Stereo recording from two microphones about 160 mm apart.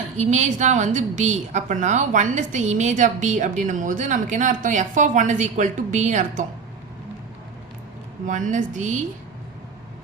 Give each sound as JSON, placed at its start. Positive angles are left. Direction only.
{"t": 0.2, "sound": "a woman's voice", "side_deg": -45}
{"t": 8.3, "sound": "a woman's voice", "side_deg": -50}